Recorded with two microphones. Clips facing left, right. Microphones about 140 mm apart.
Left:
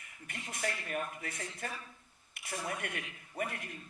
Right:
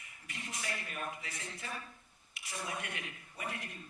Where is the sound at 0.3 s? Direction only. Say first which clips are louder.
Left 4 dB; 50° left (ahead or behind).